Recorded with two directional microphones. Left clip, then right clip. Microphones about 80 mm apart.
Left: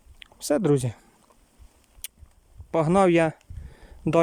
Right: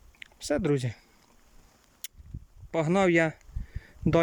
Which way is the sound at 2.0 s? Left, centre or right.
Centre.